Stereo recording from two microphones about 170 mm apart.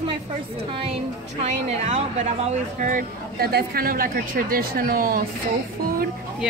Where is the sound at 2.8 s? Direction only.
60° right (ahead or behind).